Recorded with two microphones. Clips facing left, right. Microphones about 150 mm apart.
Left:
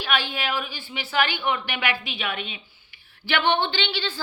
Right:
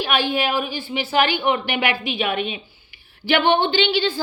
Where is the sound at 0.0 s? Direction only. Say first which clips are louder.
Right 6 dB; 15° right (ahead or behind).